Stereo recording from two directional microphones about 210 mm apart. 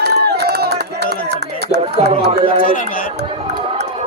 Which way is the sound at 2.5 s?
40° left (ahead or behind).